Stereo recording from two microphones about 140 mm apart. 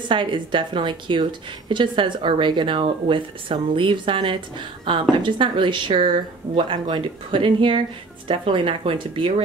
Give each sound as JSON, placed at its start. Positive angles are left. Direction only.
{"t": 0.1, "sound": "a woman's voice", "side_deg": -35}